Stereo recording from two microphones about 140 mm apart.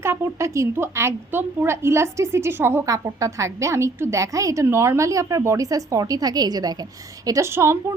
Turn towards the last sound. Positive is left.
turn(degrees=-20)  # may be behind; listen again after turning